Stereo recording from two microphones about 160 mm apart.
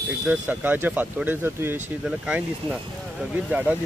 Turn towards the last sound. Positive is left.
turn(degrees=-10)  # may be behind; listen again after turning